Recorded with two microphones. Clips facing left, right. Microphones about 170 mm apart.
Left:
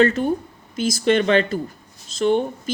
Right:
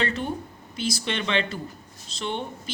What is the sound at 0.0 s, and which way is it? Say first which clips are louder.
Speech: left 10 dB; 45° left (ahead or behind).